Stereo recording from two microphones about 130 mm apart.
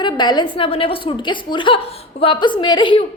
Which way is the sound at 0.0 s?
35° left (ahead or behind).